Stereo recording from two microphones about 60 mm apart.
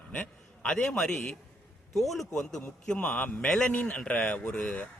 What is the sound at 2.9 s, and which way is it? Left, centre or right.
Speech, left.